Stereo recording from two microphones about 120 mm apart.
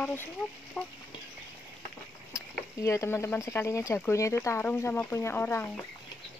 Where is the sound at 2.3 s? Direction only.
25° left (ahead or behind).